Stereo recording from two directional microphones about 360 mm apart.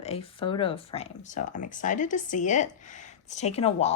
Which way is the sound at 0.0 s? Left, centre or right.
Centre.